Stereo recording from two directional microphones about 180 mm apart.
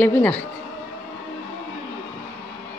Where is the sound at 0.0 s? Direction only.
10° left (ahead or behind).